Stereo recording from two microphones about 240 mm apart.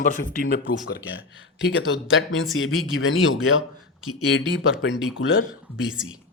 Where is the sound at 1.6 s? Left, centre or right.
Left.